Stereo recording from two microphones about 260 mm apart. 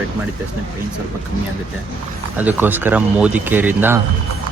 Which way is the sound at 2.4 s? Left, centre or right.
Centre.